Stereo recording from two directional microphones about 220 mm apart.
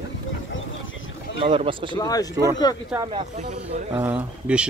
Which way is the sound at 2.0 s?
15° left (ahead or behind).